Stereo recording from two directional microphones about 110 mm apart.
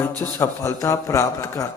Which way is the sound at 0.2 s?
20° left (ahead or behind).